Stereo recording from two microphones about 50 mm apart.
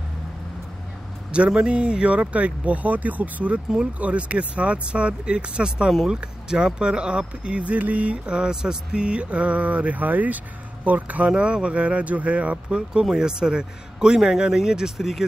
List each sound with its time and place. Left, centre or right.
1.3 s a man's voice: right